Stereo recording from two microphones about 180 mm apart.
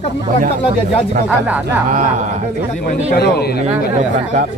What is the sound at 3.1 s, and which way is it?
Speech, 65° left (ahead or behind).